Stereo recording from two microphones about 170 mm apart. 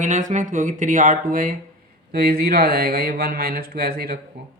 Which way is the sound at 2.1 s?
65° right (ahead or behind).